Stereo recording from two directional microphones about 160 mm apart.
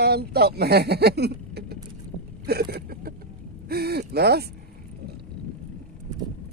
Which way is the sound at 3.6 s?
75° right (ahead or behind).